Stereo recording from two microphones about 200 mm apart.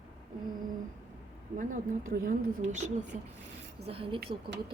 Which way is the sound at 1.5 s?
45° right (ahead or behind).